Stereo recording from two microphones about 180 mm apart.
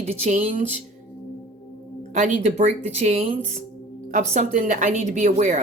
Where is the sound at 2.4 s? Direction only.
40° right (ahead or behind).